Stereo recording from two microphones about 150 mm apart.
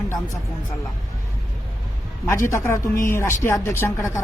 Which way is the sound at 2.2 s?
20° left (ahead or behind).